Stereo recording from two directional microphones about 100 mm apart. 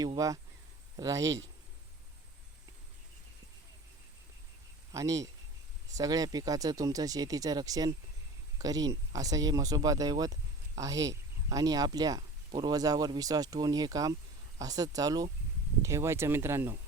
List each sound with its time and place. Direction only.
0.2 s speech: 35° right (ahead or behind)
4.9 s a man's voice: 35° right (ahead or behind)
15.8 s speech: 30° right (ahead or behind)